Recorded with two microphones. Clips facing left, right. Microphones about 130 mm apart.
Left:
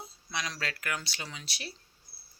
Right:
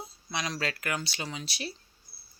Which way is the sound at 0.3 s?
20° right (ahead or behind).